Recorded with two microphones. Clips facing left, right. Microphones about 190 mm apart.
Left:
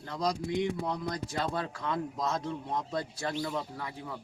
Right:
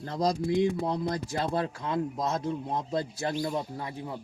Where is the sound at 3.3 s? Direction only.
35° right (ahead or behind).